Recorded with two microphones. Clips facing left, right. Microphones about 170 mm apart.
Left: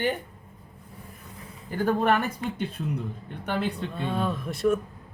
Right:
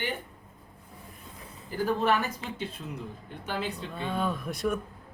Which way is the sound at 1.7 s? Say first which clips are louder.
Left 3 dB; 55° left (ahead or behind).